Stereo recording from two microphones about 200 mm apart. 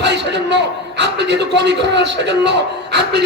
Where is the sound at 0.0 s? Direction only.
60° right (ahead or behind).